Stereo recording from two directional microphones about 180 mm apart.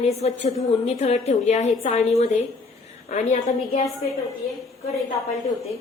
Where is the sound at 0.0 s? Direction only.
35° left (ahead or behind).